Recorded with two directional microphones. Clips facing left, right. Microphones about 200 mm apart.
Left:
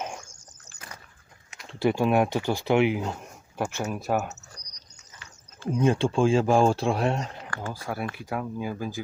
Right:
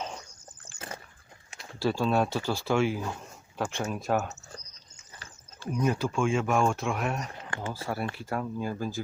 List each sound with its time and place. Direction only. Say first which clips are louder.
1.6 s speech: left 4 dB; 20° left (ahead or behind)
3.6 s speech: left 2 dB; 10° left (ahead or behind)
5.6 s speech: left 5 dB; 25° left (ahead or behind)
7.5 s speech: even; 25° right (ahead or behind)
8.2 s speech: left 1 dB; centre (ahead or behind)